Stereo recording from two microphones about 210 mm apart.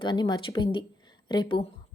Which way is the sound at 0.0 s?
20° left (ahead or behind).